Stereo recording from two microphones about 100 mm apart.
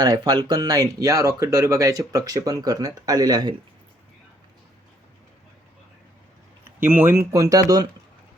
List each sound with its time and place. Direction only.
0.0 s speech: 45° right (ahead or behind)
6.8 s speech: 20° right (ahead or behind); by 7.9 s 35° right (ahead or behind)